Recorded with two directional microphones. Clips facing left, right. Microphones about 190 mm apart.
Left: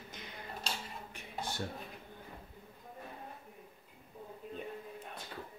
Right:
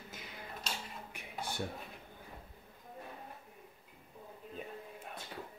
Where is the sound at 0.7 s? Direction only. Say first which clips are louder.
Left 1 dB; 30° left (ahead or behind).